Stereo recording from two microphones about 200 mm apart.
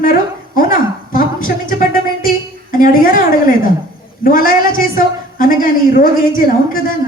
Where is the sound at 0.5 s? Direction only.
45° left (ahead or behind).